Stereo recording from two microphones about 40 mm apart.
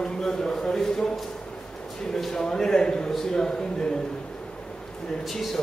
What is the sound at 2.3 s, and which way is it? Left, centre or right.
A man's voice, centre.